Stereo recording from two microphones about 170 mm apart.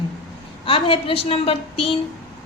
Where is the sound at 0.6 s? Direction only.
30° left (ahead or behind).